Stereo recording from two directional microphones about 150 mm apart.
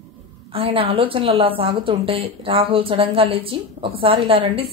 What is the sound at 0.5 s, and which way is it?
A woman's voice, 35° right (ahead or behind).